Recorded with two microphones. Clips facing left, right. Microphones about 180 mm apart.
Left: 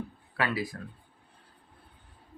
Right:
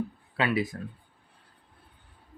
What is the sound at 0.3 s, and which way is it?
Speech, 20° right (ahead or behind).